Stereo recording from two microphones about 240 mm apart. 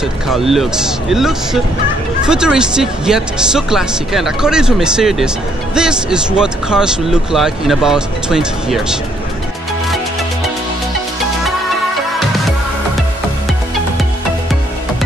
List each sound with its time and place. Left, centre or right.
0.3 s speech: centre